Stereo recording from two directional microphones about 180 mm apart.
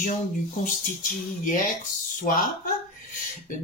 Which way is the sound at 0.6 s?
45° left (ahead or behind).